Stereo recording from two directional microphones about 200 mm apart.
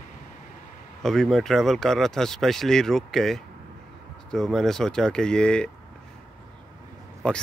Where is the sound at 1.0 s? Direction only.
Centre (ahead or behind).